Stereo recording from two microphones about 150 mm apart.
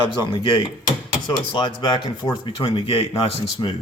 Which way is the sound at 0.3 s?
30° left (ahead or behind).